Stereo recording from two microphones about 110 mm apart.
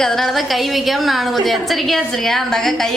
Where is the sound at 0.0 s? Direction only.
5° left (ahead or behind).